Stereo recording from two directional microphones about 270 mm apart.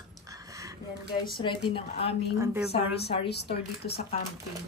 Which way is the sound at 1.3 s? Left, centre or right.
Centre.